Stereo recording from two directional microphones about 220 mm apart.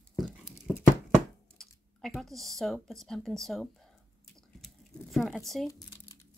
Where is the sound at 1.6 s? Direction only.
Centre (ahead or behind).